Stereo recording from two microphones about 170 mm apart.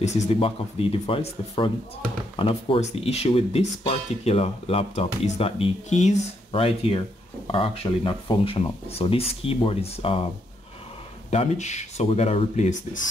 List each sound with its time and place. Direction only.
0.0 s speech: 40° left (ahead or behind)
11.2 s speech: 40° left (ahead or behind)